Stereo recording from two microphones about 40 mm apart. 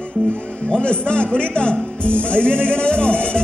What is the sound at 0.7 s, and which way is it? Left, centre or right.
Speech, left.